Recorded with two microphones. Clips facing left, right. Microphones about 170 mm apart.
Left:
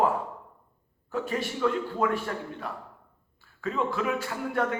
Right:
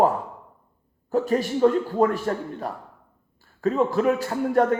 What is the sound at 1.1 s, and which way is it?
A man's voice, 40° right (ahead or behind).